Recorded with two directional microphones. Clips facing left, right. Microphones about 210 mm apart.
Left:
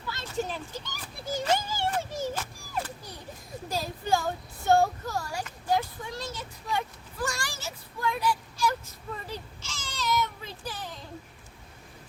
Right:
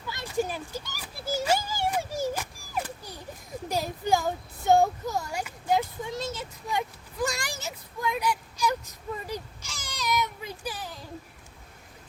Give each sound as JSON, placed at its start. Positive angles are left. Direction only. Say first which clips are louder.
{"t": 0.1, "sound": "a sound", "louder": "right 3 dB", "side_deg": -15}
{"t": 3.7, "sound": "speech", "louder": "right 2 dB", "side_deg": -15}
{"t": 9.1, "sound": "baby cry", "louder": "right 3 dB", "side_deg": -15}